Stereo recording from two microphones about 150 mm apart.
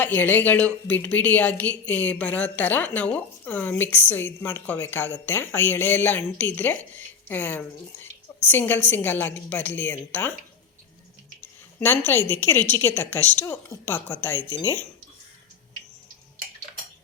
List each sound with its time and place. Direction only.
0.0 s a woman's voice: 10° left (ahead or behind)
11.3 s a woman's voice: 15° left (ahead or behind)